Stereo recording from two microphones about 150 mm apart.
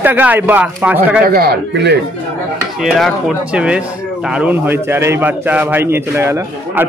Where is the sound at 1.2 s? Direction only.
90° right.